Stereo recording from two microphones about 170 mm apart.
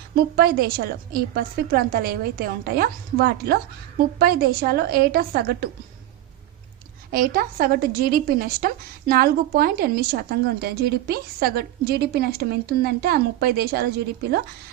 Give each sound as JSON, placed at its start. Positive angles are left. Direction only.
{"t": 0.3, "sound": "a woman's voice", "side_deg": -65}
{"t": 7.1, "sound": "a woman's voice", "side_deg": -55}